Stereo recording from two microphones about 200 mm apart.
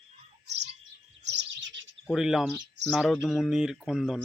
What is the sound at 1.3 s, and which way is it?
Bird, 60° right (ahead or behind).